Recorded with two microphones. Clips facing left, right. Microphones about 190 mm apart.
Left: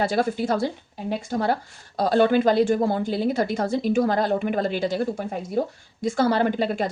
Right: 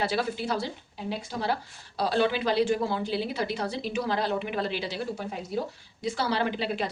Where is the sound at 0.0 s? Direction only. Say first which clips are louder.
Left 6 dB; 50° left (ahead or behind).